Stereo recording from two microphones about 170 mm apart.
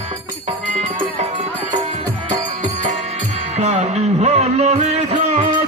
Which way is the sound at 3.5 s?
40° right (ahead or behind).